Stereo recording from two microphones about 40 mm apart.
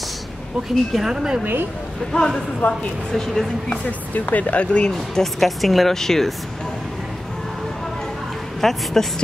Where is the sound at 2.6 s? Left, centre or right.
Left.